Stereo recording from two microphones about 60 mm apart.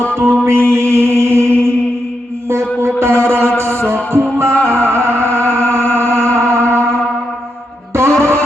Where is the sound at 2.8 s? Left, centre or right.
Right.